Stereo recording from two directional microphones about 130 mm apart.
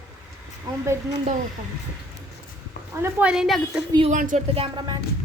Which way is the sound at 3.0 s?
15° right (ahead or behind).